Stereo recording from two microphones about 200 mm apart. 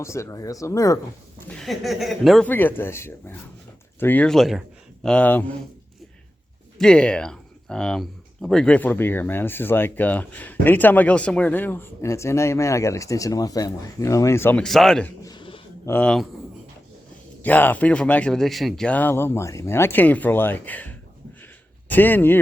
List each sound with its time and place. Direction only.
0.0 s speech: 15° left (ahead or behind)
1.4 s speech: 5° left (ahead or behind)
6.7 s speech: 5° left (ahead or behind)
15.2 s a sound: 20° left (ahead or behind)
15.9 s speech: 5° left (ahead or behind)
17.4 s speech: 10° left (ahead or behind)